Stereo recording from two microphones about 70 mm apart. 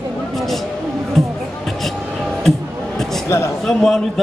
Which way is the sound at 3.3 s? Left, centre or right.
Left.